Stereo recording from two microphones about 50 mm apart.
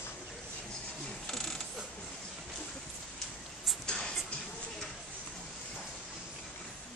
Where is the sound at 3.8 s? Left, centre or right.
Centre.